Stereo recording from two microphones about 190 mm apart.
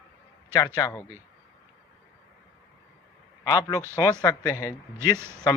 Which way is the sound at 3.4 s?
20° left (ahead or behind).